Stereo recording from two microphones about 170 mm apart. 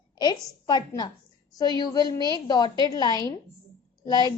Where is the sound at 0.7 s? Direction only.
25° left (ahead or behind).